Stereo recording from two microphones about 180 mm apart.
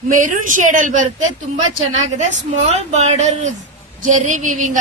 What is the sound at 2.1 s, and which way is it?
A woman's voice, 40° right (ahead or behind).